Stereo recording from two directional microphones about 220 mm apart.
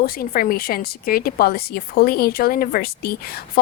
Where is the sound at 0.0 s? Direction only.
40° left (ahead or behind).